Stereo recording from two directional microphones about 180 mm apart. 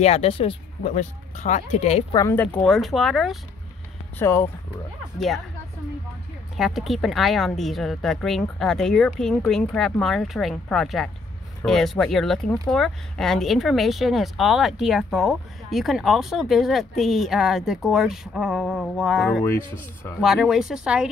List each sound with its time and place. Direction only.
0.0 s speech: 35° left (ahead or behind)
2.1 s speech: 15° left (ahead or behind)
4.2 s speech: 15° left (ahead or behind)
6.5 s speech: centre (ahead or behind)